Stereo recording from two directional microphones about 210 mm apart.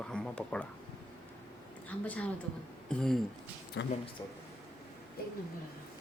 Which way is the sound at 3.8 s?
55° left (ahead or behind).